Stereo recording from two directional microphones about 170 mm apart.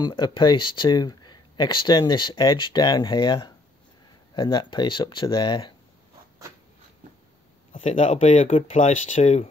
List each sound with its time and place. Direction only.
0.0 s speech: 25° left (ahead or behind)
7.7 s speech: 40° left (ahead or behind)